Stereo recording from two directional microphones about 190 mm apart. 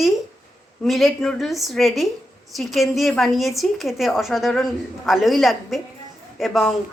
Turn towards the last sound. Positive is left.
turn(degrees=0)  # may be behind; listen again after turning